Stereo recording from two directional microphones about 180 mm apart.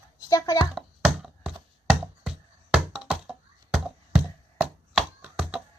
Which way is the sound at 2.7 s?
5° right (ahead or behind).